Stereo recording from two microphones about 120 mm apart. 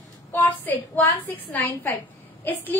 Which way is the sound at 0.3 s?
15° left (ahead or behind).